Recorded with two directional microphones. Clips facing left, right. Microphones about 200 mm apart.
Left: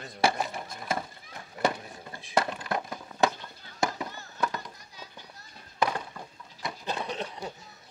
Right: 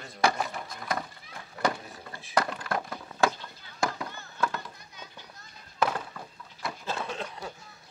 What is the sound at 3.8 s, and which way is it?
Chop, 20° left (ahead or behind).